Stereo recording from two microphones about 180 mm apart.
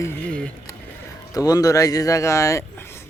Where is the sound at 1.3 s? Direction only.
20° left (ahead or behind).